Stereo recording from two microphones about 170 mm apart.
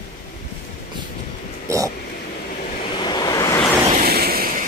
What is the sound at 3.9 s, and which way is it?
Vehicle, 65° right (ahead or behind).